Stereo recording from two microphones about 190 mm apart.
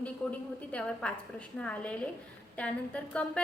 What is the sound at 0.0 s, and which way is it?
A woman's voice, 5° left (ahead or behind).